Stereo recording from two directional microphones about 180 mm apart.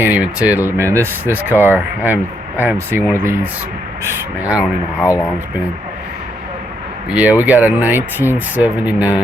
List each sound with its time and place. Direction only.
0.0 s speech: 10° right (ahead or behind)
5.0 s speech: 20° left (ahead or behind)
7.1 s speech: 10° right (ahead or behind)